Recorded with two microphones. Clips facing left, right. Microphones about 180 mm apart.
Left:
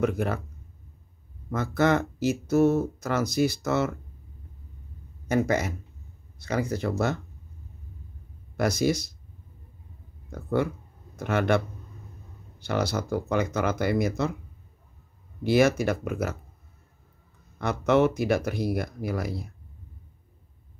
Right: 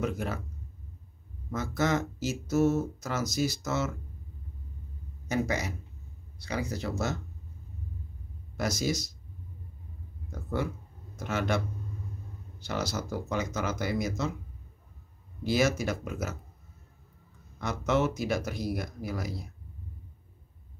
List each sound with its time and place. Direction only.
0.0 s speech: 60° left (ahead or behind)
1.5 s speech: 60° left (ahead or behind)
5.3 s speech: 55° left (ahead or behind)
8.5 s speech: 60° left (ahead or behind)
10.3 s speech: 60° left (ahead or behind)
15.4 s speech: 60° left (ahead or behind)
17.6 s speech: 60° left (ahead or behind)